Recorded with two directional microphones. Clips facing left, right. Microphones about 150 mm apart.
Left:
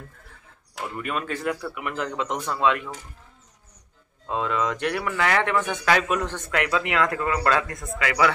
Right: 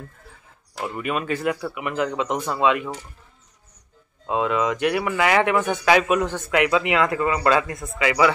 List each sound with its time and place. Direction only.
0.8 s speech: 10° right (ahead or behind)
4.3 s speech: 5° right (ahead or behind)